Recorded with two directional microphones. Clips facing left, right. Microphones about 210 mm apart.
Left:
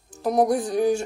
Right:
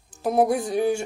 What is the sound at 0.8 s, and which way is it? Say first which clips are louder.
Speech: left 2 dB; 25° right (ahead or behind).